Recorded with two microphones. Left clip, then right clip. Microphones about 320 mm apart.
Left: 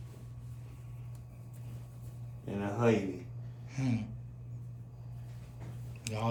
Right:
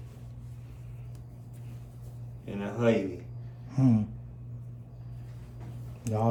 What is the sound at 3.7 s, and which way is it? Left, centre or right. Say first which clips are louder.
Gasp: right 10 dB; centre.